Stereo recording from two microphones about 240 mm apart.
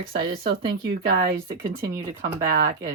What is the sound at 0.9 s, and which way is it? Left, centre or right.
Speech, right.